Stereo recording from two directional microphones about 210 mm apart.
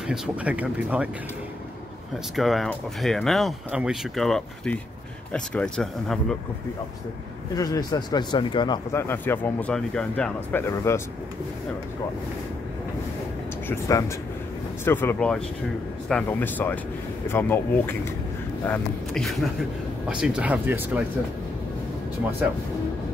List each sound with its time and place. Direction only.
0.0 s speech: 5° right (ahead or behind)
2.3 s speech: centre (ahead or behind)
7.5 s speech: 15° left (ahead or behind)
9.0 s speech: 10° left (ahead or behind)
13.7 s speech: 15° left (ahead or behind); by 21.0 s 10° right (ahead or behind)